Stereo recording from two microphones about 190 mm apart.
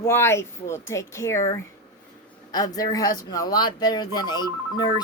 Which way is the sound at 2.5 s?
20° left (ahead or behind).